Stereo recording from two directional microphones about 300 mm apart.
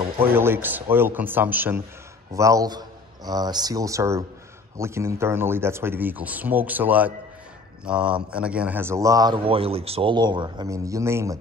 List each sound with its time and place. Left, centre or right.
0.2 s speech: centre